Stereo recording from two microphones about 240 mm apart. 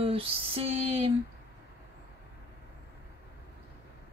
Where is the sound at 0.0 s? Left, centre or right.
Right.